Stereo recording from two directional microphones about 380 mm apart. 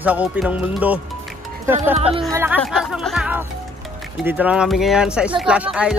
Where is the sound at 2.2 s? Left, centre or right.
Centre.